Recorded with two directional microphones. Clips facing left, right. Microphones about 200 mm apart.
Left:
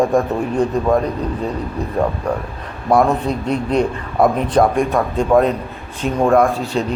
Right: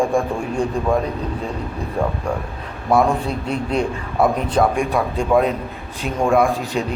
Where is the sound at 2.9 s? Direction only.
5° right (ahead or behind).